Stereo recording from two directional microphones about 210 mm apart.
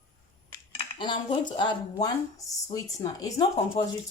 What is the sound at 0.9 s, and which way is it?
Speech, 25° left (ahead or behind).